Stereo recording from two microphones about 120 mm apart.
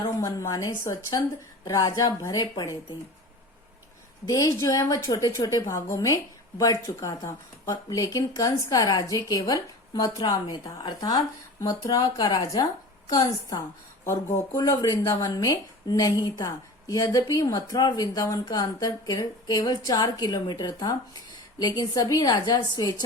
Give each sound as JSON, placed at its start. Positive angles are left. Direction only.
{"t": 0.2, "sound": "speech", "side_deg": 25}
{"t": 4.3, "sound": "a woman's voice", "side_deg": 25}